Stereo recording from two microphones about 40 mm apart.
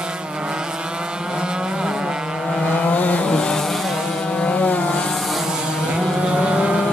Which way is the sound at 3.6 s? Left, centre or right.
Centre.